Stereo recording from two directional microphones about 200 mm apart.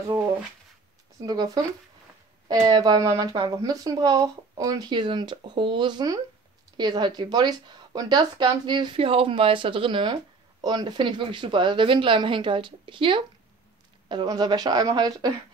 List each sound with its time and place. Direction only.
1.2 s speech: 20° right (ahead or behind)